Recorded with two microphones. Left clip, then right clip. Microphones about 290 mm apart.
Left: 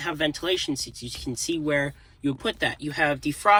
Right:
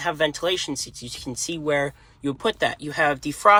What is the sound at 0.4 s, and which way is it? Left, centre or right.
Speech, right.